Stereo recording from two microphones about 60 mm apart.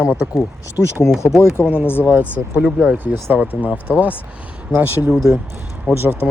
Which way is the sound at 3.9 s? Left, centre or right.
Right.